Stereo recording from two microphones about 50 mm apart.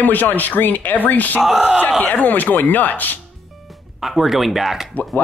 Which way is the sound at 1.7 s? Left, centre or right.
Left.